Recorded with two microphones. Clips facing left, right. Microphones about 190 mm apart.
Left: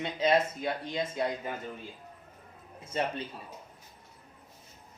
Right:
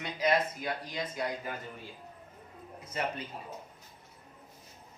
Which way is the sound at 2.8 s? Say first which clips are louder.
Left 3 dB; 30° left (ahead or behind).